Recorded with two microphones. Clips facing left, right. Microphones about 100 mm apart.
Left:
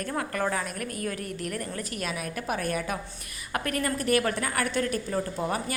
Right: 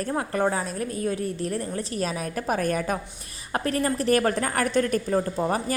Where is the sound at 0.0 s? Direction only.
30° right (ahead or behind).